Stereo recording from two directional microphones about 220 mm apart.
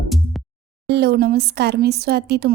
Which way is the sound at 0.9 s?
45° right (ahead or behind).